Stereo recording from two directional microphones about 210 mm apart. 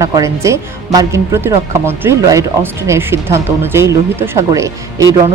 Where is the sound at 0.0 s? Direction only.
15° right (ahead or behind).